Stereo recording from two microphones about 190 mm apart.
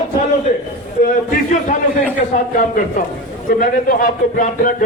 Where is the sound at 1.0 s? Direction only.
45° left (ahead or behind).